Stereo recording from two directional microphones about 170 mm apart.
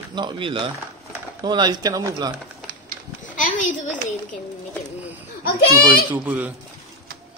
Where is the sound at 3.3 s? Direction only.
50° left (ahead or behind).